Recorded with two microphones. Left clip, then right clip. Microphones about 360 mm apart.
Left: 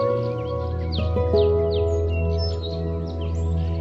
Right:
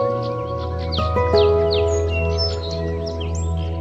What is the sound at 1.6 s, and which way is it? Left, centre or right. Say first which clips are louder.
Music: right 4 dB; right.